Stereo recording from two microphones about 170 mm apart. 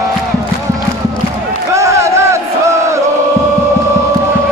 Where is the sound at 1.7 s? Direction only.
15° right (ahead or behind).